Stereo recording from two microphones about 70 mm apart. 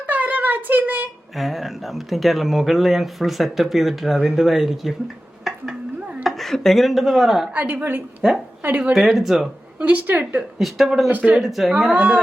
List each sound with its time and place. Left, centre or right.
0.1 s a sound: right
1.4 s speech: centre
5.5 s a sound: centre
6.2 s speech: centre
7.5 s a woman's voice: right
8.8 s speech: centre
9.7 s a woman's voice: right
10.6 s speech: centre
11.9 s speech: centre